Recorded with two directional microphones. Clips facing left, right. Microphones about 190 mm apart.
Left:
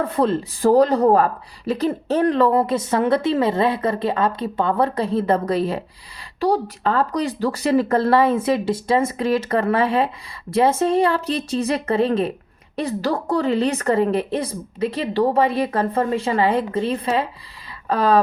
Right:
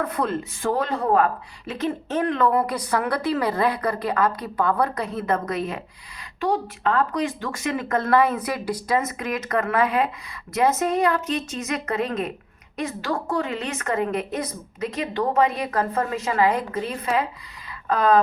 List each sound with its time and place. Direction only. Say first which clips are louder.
0.0 s speech: left 5 dB; 30° left (ahead or behind)